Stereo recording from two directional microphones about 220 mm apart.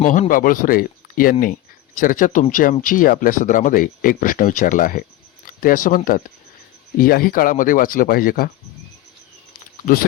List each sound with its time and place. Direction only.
0.0 s speech: 35° left (ahead or behind)
9.8 s speech: 45° left (ahead or behind)